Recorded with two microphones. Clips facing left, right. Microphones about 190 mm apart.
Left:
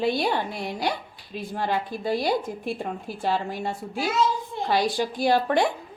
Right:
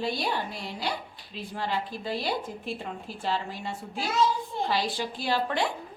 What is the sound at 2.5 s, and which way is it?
A woman's voice, 55° left (ahead or behind).